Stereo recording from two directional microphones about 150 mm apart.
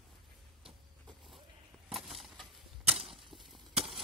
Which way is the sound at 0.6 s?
Centre (ahead or behind).